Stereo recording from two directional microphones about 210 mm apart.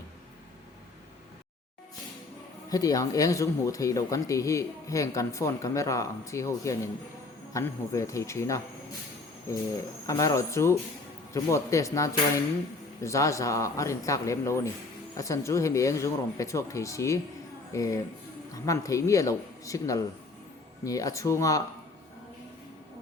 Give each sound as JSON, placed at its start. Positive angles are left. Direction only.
{"t": 2.6, "sound": "speech", "side_deg": 15}
{"t": 10.1, "sound": "speech", "side_deg": 15}